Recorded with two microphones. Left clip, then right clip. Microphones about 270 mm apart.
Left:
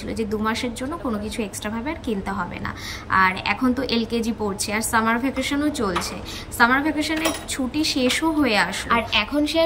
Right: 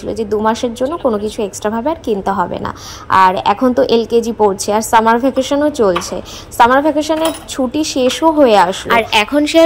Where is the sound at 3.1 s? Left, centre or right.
Right.